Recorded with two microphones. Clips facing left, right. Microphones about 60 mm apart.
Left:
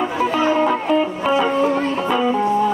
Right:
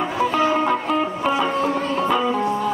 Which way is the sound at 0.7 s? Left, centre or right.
Centre.